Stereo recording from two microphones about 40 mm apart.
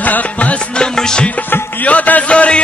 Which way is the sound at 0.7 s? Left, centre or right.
Centre.